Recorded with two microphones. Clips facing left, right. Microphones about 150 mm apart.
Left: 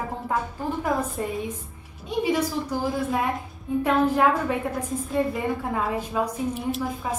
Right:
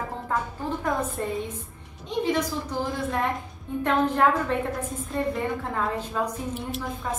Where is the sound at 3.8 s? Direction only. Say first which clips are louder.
Left 2 dB; 10° left (ahead or behind).